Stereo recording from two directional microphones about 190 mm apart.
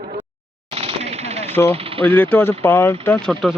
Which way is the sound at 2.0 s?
10° left (ahead or behind).